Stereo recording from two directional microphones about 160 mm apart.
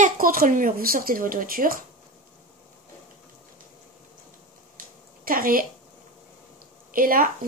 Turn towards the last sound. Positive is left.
turn(degrees=-60)  # may be behind; listen again after turning